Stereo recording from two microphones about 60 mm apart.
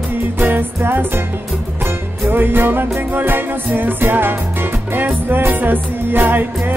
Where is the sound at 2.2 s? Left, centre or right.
Right.